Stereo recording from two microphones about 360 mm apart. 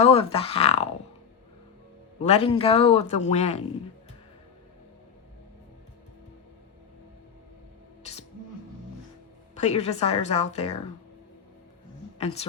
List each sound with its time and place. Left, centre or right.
0.0 s a man's voice: centre
2.1 s a man's voice: centre
9.6 s a man's voice: centre
12.2 s a man's voice: centre